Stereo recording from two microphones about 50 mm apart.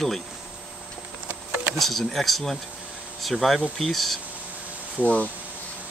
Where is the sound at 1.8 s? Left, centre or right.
Centre.